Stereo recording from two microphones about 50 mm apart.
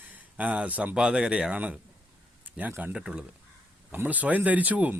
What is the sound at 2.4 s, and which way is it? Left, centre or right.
Speech, right.